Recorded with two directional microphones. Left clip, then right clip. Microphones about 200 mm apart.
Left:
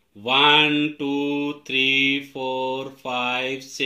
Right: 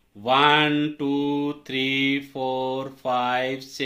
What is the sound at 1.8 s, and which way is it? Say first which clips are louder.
Speech: left 5 dB; 20° right (ahead or behind).